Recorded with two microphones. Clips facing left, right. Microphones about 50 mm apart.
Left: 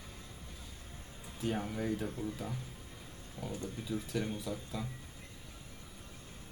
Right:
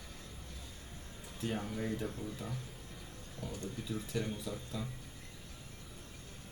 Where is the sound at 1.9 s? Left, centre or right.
Centre.